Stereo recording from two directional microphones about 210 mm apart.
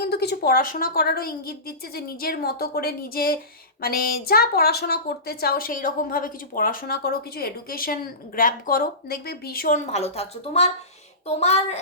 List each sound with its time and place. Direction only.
0.0 s a woman's voice: 50° left (ahead or behind); by 11.8 s 30° left (ahead or behind)